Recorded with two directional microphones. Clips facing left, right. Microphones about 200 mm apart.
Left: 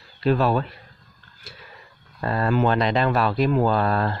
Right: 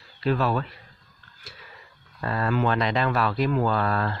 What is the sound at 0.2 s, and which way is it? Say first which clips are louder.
Speech: left 4 dB; 30° left (ahead or behind).